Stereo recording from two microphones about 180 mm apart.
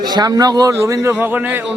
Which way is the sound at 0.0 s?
20° right (ahead or behind).